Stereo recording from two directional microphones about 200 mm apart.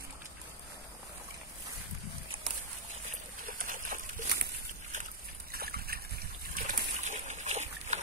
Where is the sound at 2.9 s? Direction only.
45° right (ahead or behind).